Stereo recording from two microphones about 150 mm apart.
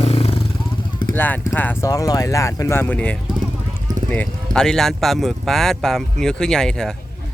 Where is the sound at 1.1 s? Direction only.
15° left (ahead or behind).